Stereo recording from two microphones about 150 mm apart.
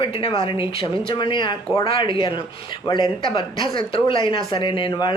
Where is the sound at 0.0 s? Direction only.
35° left (ahead or behind).